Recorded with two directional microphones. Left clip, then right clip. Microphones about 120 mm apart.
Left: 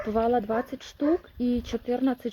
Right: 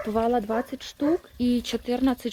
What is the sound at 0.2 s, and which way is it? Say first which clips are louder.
A woman's voice: even; 15° right (ahead or behind).